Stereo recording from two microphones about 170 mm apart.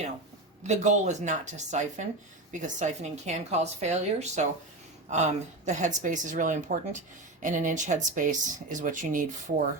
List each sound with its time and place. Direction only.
0.6 s speech: 45° right (ahead or behind)